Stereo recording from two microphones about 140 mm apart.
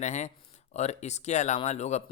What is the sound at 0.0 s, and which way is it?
Speech, 55° left (ahead or behind).